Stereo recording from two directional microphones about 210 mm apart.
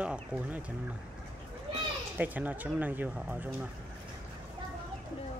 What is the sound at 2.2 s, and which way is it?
Speech, 10° right (ahead or behind).